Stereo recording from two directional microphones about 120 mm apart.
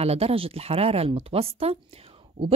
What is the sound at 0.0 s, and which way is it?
A woman's voice, 60° right (ahead or behind).